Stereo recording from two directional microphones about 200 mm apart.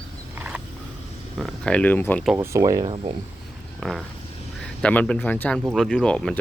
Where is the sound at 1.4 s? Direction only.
5° left (ahead or behind).